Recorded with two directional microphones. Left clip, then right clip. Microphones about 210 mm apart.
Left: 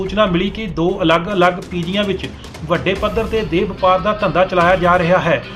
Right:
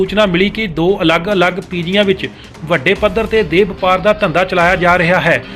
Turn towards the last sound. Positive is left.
turn(degrees=-20)  # may be behind; listen again after turning